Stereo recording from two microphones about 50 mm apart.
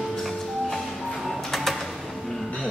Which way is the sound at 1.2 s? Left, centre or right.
Centre.